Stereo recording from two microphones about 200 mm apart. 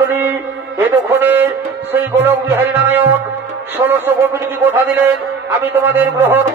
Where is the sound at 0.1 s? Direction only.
10° right (ahead or behind).